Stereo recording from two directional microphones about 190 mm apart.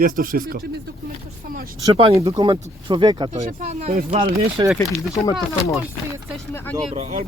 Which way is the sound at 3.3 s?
40° right (ahead or behind).